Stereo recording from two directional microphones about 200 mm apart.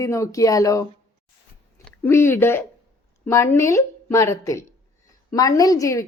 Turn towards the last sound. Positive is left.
turn(degrees=15)  # may be behind; listen again after turning